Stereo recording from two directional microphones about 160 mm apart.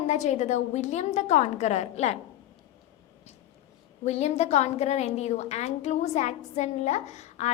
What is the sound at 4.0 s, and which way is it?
A woman's voice, 45° left (ahead or behind).